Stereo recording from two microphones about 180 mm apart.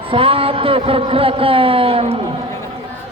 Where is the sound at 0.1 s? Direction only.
30° right (ahead or behind).